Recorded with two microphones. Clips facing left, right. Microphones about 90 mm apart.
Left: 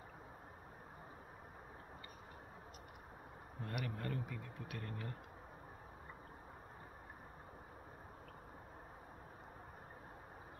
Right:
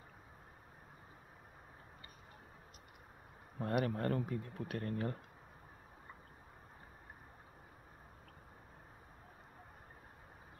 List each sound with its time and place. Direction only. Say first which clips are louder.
3.6 s speech: right 9 dB; 45° right (ahead or behind)